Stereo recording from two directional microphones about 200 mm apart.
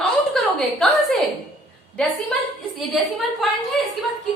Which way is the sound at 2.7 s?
Centre (ahead or behind).